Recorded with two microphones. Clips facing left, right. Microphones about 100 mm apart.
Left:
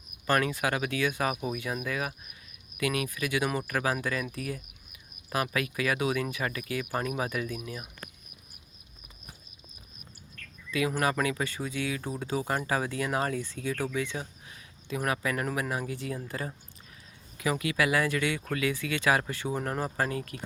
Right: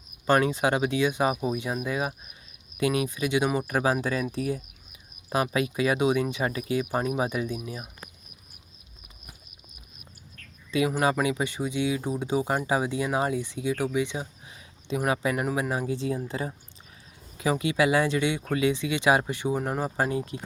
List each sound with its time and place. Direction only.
0.3 s speech: 25° right (ahead or behind)
10.7 s speech: 20° right (ahead or behind)